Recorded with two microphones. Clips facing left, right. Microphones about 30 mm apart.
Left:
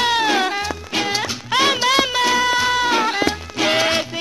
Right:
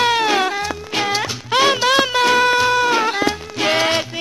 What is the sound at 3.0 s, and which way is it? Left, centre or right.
Music, left.